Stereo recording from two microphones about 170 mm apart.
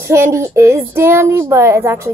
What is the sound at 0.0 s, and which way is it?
Speech, 15° right (ahead or behind).